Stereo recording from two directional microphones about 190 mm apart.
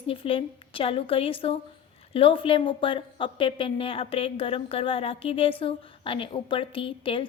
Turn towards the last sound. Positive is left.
turn(degrees=25)  # may be behind; listen again after turning